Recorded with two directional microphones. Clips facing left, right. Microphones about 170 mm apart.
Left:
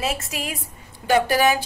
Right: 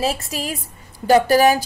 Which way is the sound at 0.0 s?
35° right (ahead or behind).